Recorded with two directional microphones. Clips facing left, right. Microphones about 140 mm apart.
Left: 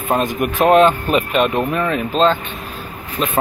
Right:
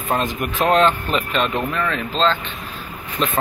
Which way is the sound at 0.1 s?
15° left (ahead or behind).